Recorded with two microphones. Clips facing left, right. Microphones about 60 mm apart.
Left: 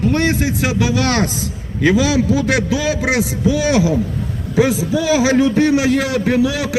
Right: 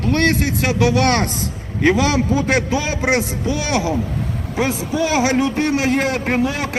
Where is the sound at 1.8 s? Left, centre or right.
Right.